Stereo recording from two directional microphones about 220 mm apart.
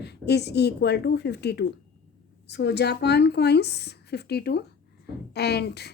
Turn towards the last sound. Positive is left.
turn(degrees=50)  # may be behind; listen again after turning